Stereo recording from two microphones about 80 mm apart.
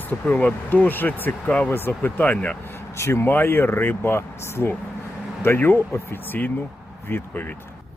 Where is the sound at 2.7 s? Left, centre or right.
Left.